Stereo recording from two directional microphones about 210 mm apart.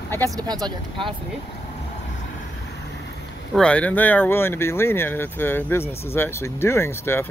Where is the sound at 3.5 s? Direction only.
5° left (ahead or behind).